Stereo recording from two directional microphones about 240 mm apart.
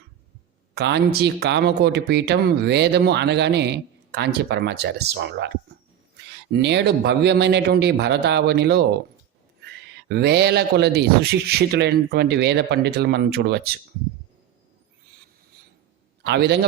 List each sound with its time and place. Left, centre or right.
0.7 s speech: right
6.5 s speech: right
10.1 s speech: right
16.2 s speech: right